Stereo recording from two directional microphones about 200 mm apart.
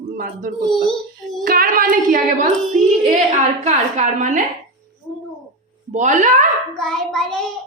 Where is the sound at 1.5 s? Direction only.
45° right (ahead or behind).